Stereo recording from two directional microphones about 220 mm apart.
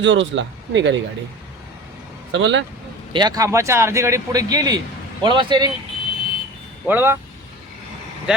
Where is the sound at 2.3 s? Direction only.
55° right (ahead or behind).